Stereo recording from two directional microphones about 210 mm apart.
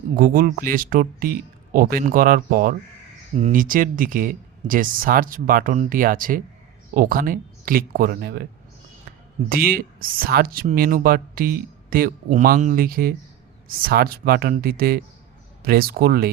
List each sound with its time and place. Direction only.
0.2 s speech: 40° right (ahead or behind)